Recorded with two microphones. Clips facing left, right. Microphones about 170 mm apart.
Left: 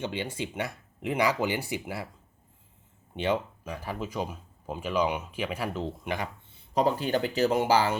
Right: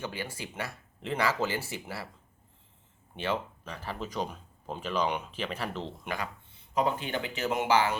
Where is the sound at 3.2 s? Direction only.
15° left (ahead or behind).